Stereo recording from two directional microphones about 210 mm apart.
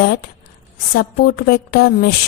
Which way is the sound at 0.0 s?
45° left (ahead or behind).